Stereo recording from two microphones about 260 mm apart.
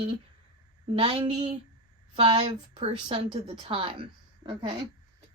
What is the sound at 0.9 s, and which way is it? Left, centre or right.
A woman's voice, centre.